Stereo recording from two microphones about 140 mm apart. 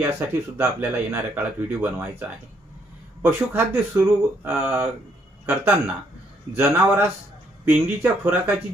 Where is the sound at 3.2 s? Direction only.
15° right (ahead or behind).